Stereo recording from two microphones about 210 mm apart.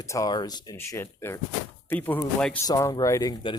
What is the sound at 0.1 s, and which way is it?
Speech, 20° left (ahead or behind).